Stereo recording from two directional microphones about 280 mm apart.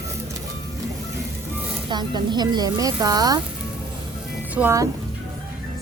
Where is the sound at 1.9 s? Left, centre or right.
Centre.